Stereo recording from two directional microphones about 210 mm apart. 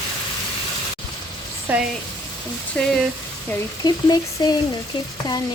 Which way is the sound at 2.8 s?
5° left (ahead or behind).